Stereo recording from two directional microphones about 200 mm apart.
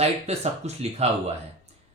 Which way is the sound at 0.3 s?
35° right (ahead or behind).